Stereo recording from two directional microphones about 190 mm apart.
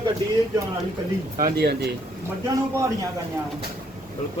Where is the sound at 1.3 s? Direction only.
55° right (ahead or behind).